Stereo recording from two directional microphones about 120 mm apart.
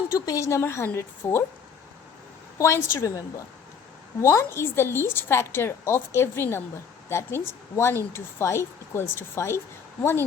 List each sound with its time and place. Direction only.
0.1 s a woman's voice: 25° left (ahead or behind)
2.6 s a woman's voice: 25° left (ahead or behind)